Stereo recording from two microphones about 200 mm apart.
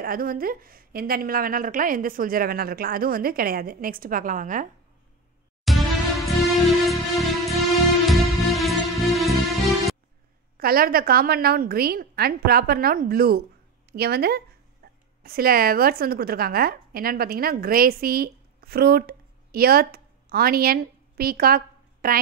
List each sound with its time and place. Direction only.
0.0 s a woman's voice: 45° right (ahead or behind)
5.7 s music: centre (ahead or behind)
10.6 s a woman's voice: 50° right (ahead or behind)
14.8 s a sound: 50° right (ahead or behind)
15.2 s a woman's voice: 50° right (ahead or behind)